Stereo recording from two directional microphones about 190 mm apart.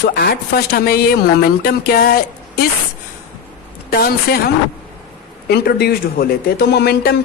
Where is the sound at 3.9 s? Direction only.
55° left (ahead or behind).